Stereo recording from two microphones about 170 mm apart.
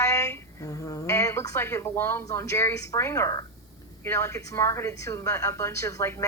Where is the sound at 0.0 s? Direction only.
15° left (ahead or behind).